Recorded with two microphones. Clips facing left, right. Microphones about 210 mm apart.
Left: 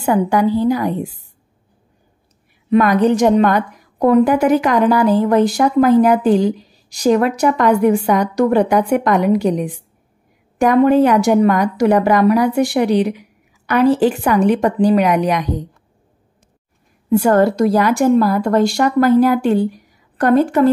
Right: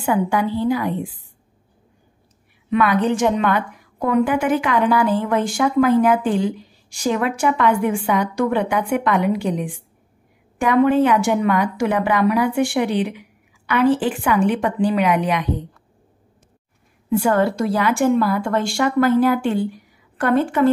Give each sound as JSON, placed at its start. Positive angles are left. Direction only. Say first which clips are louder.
{"t": 0.0, "sound": "a woman's voice", "louder": "left 5 dB", "side_deg": 40}
{"t": 2.7, "sound": "a woman's voice", "louder": "left 5 dB", "side_deg": 40}
{"t": 17.1, "sound": "a woman's voice", "louder": "left 5 dB", "side_deg": 40}